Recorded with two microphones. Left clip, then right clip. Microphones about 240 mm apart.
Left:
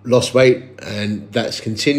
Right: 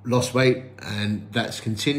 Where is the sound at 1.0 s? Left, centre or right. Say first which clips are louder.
Left 6 dB; left.